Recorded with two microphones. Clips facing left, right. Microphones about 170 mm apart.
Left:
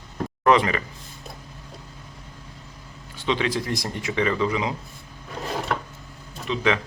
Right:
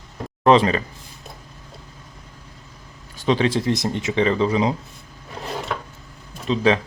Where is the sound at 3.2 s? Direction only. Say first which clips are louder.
Right 5 dB; 40° right (ahead or behind).